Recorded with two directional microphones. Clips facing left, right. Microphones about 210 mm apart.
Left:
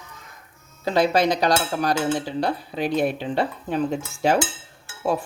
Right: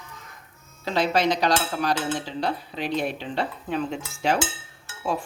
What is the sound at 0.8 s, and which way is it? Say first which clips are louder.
Dishes: left 3 dB; 45° left (ahead or behind).